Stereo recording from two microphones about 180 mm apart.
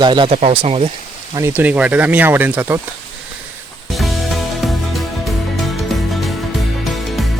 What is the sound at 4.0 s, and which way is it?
Music, centre (ahead or behind).